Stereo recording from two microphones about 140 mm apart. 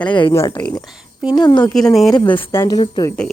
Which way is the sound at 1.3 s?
30° left (ahead or behind).